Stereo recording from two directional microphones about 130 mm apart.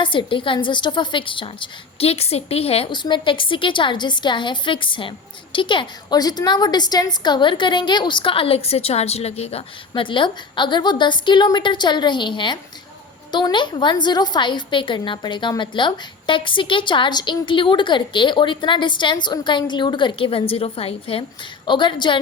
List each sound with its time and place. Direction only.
0.0 s a woman's voice: 40° left (ahead or behind)
2.9 s a woman's voice: 35° left (ahead or behind)